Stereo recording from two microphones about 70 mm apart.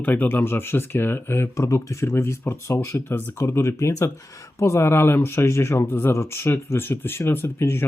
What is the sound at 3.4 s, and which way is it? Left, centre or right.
Speech, left.